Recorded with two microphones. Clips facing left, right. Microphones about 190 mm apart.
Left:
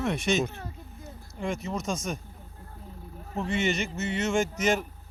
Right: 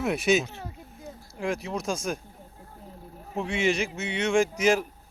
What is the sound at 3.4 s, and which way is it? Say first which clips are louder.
Speech: right 2 dB; centre (ahead or behind).